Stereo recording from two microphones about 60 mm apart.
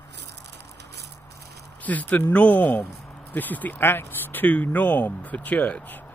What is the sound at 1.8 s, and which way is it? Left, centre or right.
Speech, left.